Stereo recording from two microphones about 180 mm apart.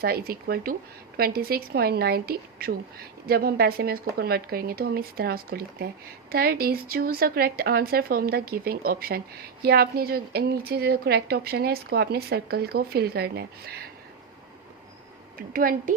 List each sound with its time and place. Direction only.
0.0 s a woman's voice: 60° right (ahead or behind)
15.4 s a woman's voice: 50° right (ahead or behind)